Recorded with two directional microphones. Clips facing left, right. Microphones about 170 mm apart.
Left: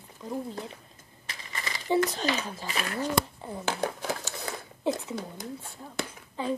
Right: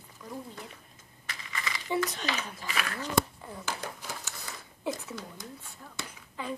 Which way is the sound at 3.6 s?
55° left (ahead or behind).